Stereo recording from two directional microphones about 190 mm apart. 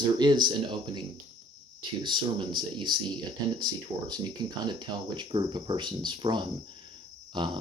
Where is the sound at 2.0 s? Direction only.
25° right (ahead or behind).